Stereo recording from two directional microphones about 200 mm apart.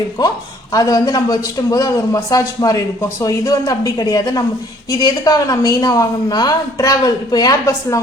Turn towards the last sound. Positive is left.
turn(degrees=15)  # may be behind; listen again after turning